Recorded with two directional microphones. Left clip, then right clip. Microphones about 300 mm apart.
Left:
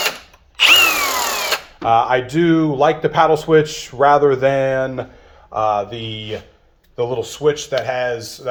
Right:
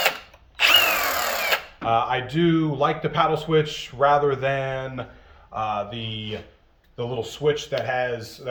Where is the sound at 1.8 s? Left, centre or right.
Centre.